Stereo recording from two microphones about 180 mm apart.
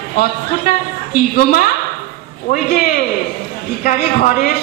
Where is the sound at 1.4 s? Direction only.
55° left (ahead or behind).